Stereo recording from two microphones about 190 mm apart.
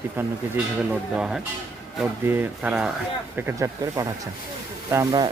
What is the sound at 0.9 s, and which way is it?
A man's voice, 5° right (ahead or behind).